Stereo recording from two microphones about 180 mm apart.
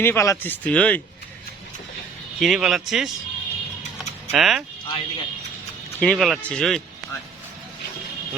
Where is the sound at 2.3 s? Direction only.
Centre (ahead or behind).